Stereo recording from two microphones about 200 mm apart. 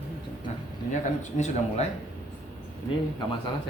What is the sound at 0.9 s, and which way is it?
Speech, 35° left (ahead or behind).